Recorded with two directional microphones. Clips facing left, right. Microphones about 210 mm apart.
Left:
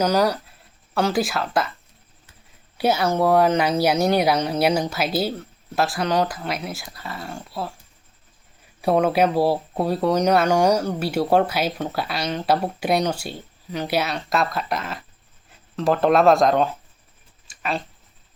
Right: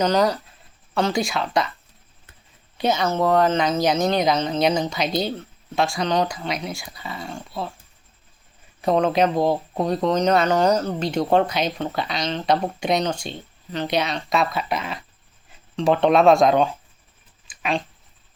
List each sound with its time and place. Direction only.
0.0 s speech: 10° left (ahead or behind)
2.7 s speech: 10° left (ahead or behind)
8.8 s speech: 10° left (ahead or behind)